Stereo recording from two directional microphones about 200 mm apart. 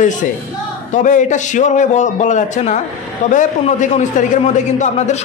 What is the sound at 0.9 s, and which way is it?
A man's voice, 40° left (ahead or behind).